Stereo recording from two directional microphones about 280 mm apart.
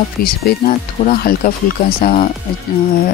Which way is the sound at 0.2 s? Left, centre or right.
Left.